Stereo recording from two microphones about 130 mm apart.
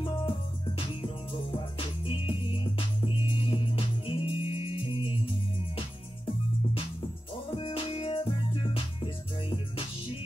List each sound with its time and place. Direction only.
1.8 s music: 45° left (ahead or behind)
7.5 s music: 45° left (ahead or behind)